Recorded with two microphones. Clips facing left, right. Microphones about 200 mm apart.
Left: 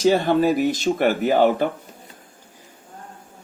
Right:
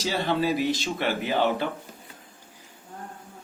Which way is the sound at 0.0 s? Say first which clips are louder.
Left 8 dB; 50° left (ahead or behind).